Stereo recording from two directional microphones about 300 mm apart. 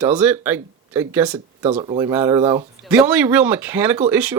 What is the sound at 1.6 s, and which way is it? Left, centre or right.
Speech, centre.